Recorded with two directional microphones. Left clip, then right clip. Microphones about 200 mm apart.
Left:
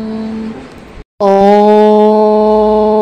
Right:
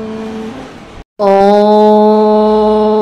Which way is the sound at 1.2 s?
25° left (ahead or behind).